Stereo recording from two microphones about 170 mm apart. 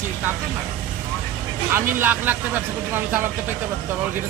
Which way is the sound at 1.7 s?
15° right (ahead or behind).